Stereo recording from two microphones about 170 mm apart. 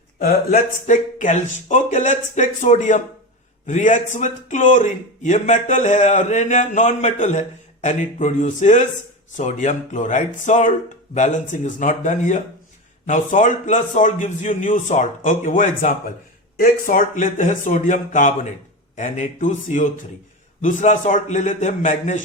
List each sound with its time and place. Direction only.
0.2 s a man's voice: 55° left (ahead or behind)